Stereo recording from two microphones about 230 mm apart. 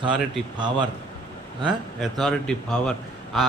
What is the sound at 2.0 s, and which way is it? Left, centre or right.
A man's voice, centre.